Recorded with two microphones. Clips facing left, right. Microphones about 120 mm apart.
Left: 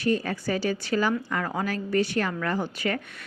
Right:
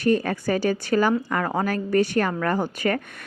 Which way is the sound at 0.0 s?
50° right (ahead or behind).